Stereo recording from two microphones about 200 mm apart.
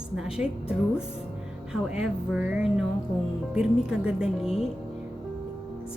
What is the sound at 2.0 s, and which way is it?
A woman's voice, 5° right (ahead or behind).